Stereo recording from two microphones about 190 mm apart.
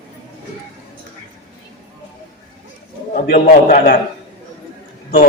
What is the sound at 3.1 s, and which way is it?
Speech, 50° left (ahead or behind).